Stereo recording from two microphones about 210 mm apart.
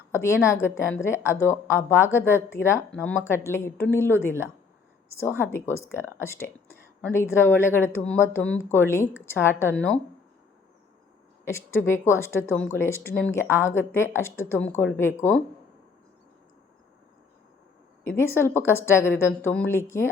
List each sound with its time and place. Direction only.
0.1 s a woman's voice: 10° left (ahead or behind)
11.4 s a woman's voice: 10° left (ahead or behind)
18.0 s a woman's voice: 10° left (ahead or behind)